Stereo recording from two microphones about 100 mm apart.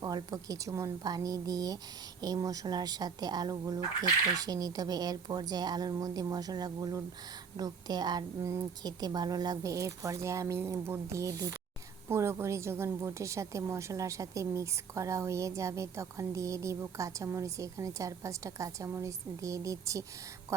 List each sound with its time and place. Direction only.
0.0 s a woman's voice: 40° right (ahead or behind)